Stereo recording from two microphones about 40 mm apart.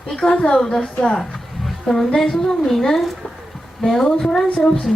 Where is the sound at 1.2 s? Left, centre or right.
Centre.